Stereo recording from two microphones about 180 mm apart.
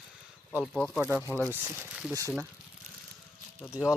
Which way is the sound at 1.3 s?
10° left (ahead or behind).